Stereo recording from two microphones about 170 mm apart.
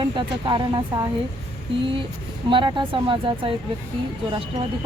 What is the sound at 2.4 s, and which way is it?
Speech, 30° right (ahead or behind).